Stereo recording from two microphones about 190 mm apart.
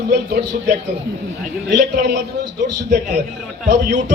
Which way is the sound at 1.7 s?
60° right (ahead or behind).